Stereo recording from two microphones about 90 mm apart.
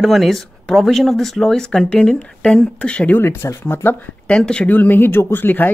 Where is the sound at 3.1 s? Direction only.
25° left (ahead or behind).